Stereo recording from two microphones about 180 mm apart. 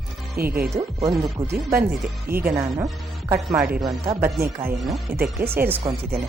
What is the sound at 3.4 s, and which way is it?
Speech, 5° right (ahead or behind).